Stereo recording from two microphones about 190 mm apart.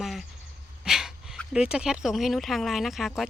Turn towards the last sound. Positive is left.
turn(degrees=0)  # may be behind; listen again after turning